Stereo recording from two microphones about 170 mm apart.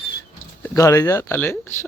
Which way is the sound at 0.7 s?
20° left (ahead or behind).